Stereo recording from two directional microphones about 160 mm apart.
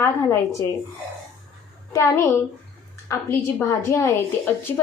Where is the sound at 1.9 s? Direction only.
15° left (ahead or behind).